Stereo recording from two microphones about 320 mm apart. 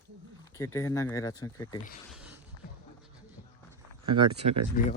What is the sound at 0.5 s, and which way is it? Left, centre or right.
Speech, centre.